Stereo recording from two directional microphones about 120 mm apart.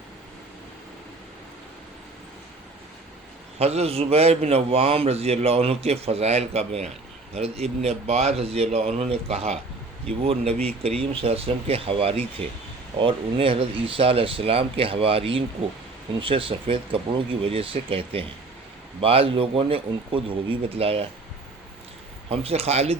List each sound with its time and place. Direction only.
3.6 s a man's voice: 60° right (ahead or behind)
22.3 s a man's voice: 55° right (ahead or behind)